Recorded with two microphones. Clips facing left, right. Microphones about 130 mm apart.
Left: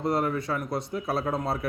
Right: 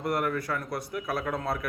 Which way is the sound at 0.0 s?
25° left (ahead or behind).